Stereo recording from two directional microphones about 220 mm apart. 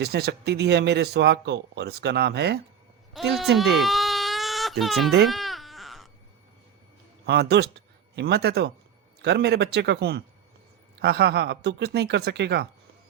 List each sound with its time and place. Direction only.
0.0 s speech: 45° right (ahead or behind)
3.1 s speech: centre (ahead or behind)
3.6 s baby cry: centre (ahead or behind)
4.8 s speech: centre (ahead or behind)
5.3 s baby cry: centre (ahead or behind)
7.3 s speech: 50° right (ahead or behind)